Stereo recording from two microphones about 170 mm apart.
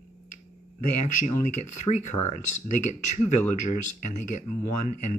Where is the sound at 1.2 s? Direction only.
45° left (ahead or behind).